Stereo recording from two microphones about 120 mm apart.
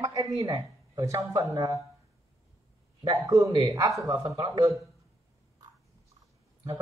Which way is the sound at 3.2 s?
25° right (ahead or behind).